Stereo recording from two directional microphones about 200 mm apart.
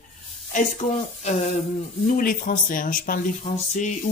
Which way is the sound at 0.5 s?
35° left (ahead or behind).